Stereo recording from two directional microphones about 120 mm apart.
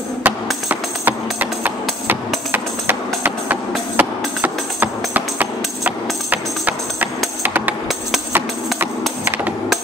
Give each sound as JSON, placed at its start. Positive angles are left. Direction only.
{"t": 0.2, "sound": "music", "side_deg": -15}